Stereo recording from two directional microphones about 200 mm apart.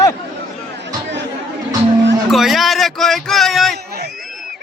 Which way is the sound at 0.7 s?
60° right (ahead or behind).